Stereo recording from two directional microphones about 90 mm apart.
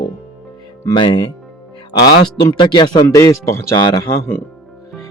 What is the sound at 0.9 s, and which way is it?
A man's voice, 60° left (ahead or behind).